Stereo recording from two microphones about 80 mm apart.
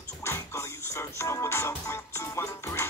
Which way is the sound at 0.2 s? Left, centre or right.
Left.